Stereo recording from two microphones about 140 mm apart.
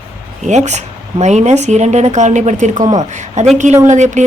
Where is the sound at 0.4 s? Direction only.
55° right (ahead or behind).